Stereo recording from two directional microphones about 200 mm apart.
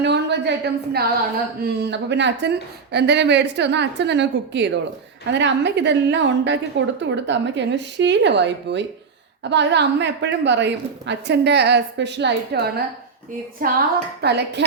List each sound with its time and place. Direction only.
0.0 s a woman's voice: 60° right (ahead or behind)
13.6 s a sound: 45° right (ahead or behind)
14.2 s a woman's voice: 55° right (ahead or behind)